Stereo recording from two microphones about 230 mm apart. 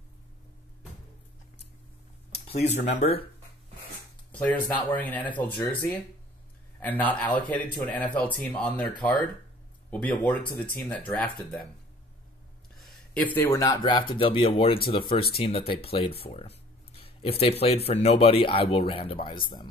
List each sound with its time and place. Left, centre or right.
2.8 s speech: left
4.3 s a sound: centre
4.9 s speech: centre
12.7 s speech: centre; by 16.1 s left
16.3 s a sound: left
17.8 s speech: left